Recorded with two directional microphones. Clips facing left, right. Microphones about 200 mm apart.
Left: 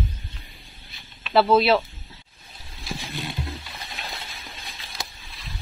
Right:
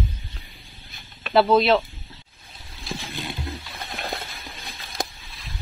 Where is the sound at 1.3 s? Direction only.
Centre (ahead or behind).